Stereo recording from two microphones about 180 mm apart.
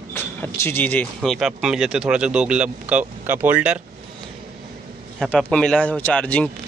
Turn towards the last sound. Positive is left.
turn(degrees=5)  # may be behind; listen again after turning